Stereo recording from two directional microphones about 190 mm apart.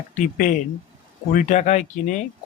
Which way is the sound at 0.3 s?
45° left (ahead or behind).